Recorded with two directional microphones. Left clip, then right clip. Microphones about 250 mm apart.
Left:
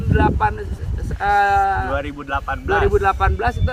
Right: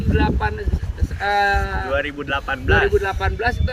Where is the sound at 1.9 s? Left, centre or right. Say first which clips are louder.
Right 3 dB; left.